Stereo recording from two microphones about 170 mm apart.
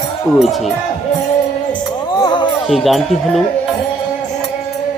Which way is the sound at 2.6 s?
Centre (ahead or behind).